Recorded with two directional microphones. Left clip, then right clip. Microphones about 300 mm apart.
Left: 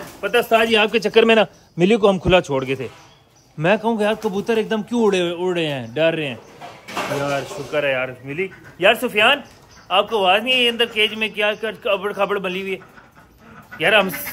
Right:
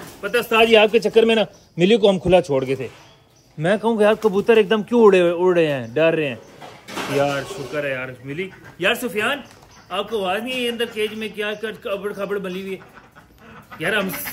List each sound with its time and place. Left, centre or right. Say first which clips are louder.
0.2 s a man's voice: left 1 dB; centre